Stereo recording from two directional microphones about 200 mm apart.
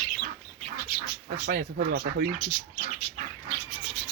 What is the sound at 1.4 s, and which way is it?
Speech, 50° right (ahead or behind).